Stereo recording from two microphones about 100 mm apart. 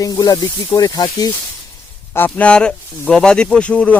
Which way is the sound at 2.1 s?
15° left (ahead or behind).